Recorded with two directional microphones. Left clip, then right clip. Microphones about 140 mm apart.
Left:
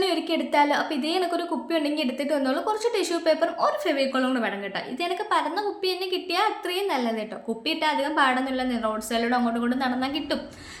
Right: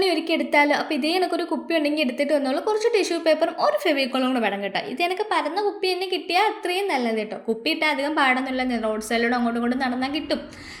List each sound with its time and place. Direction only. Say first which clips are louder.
0.0 s a woman's voice: right 3 dB; 15° right (ahead or behind)